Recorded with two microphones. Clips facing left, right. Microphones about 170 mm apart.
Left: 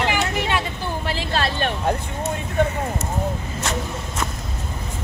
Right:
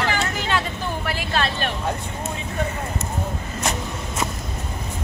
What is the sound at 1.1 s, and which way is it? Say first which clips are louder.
Vehicle: left 1 dB; 30° left (ahead or behind).